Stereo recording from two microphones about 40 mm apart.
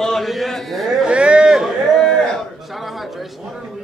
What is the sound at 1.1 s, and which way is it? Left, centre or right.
Speech, right.